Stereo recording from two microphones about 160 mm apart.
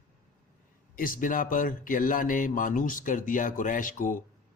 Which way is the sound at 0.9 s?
60° left (ahead or behind).